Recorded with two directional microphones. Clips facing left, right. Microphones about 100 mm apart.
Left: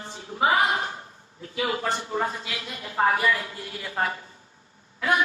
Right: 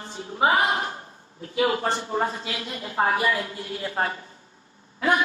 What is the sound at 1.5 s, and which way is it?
A man's voice, 35° right (ahead or behind).